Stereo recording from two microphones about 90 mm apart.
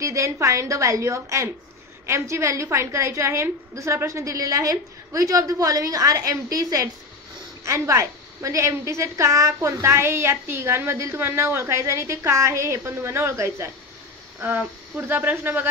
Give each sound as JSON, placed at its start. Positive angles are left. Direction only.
{"t": 0.0, "sound": "a woman's voice", "side_deg": -35}
{"t": 15.0, "sound": "speech", "side_deg": -25}